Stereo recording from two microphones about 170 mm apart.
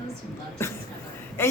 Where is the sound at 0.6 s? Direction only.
15° left (ahead or behind).